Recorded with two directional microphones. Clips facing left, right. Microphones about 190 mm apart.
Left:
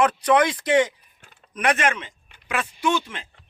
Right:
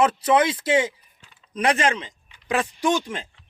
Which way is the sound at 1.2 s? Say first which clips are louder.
Left 2 dB; 55° left (ahead or behind).